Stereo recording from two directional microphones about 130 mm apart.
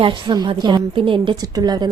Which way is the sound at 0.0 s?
35° right (ahead or behind).